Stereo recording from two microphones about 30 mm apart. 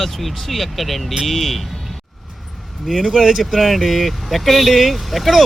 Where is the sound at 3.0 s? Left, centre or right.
Centre.